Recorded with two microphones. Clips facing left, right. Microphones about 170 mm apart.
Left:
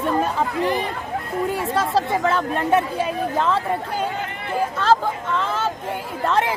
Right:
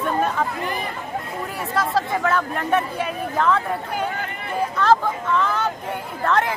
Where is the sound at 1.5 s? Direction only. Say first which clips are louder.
Left 1 dB; 30° left (ahead or behind).